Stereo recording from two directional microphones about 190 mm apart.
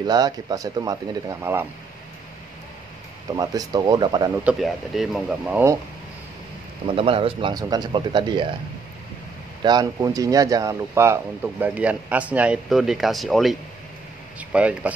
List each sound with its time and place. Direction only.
0.0 s speech: 20° right (ahead or behind)
3.3 s speech: 20° right (ahead or behind)
4.5 s speech: centre (ahead or behind)
7.0 s speech: 30° right (ahead or behind)
9.6 s speech: 20° right (ahead or behind); by 14.9 s 5° right (ahead or behind)